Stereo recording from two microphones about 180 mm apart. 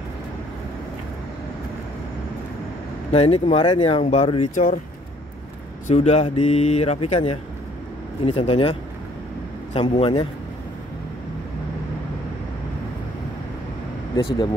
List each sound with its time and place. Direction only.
3.1 s speech: 35° left (ahead or behind)
5.9 s speech: 35° left (ahead or behind)
9.8 s speech: 30° left (ahead or behind)
14.1 s speech: 25° left (ahead or behind)